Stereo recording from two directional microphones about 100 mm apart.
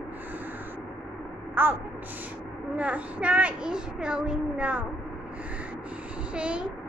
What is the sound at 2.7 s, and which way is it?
A child's voice, 15° right (ahead or behind).